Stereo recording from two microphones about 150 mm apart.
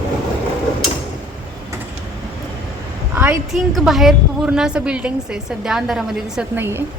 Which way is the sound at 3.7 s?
Centre (ahead or behind).